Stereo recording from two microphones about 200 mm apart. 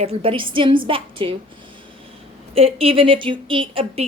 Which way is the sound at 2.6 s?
30° right (ahead or behind).